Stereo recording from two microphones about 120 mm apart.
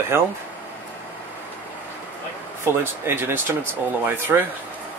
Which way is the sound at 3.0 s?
20° right (ahead or behind).